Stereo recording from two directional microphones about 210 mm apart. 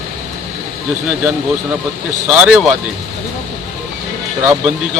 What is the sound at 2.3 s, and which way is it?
Speech, 5° right (ahead or behind).